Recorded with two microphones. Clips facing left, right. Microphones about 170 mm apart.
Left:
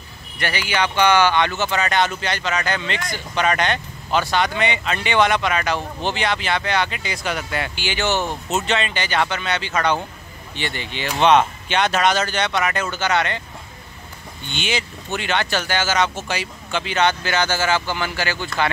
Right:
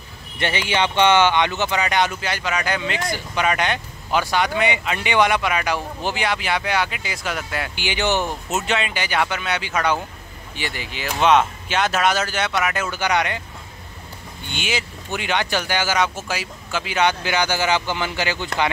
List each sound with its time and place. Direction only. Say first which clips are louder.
0.4 s speech: right 1 dB; 25° right (ahead or behind); by 7.7 s centre (ahead or behind)
7.7 s speech: right 2 dB; 15° right (ahead or behind)
14.5 s speech: left 1 dB; 5° right (ahead or behind)